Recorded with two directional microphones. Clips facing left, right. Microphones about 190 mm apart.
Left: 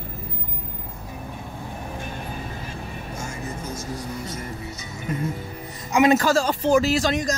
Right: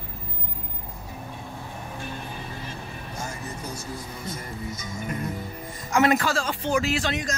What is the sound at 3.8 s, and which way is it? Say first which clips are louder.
Vehicle: left 5 dB; 90° left.